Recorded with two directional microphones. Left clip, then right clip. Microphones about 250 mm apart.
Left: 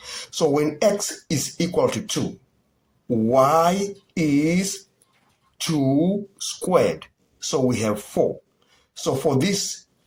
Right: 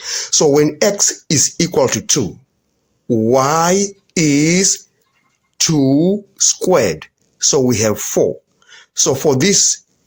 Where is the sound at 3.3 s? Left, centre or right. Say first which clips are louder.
Right 3 dB; right.